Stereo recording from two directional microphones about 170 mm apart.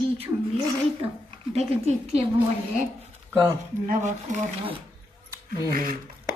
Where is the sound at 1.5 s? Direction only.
35° right (ahead or behind).